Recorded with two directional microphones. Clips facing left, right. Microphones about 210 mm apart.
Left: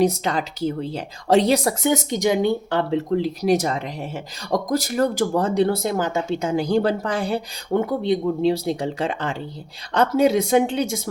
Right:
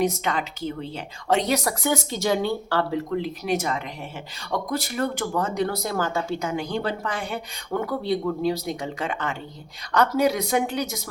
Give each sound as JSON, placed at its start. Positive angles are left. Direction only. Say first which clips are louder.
{"t": 0.0, "sound": "speech", "louder": "left 4 dB", "side_deg": 35}
{"t": 3.1, "sound": "speech", "louder": "left 6 dB", "side_deg": 35}